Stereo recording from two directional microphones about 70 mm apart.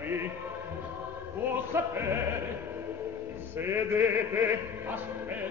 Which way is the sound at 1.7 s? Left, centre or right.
Right.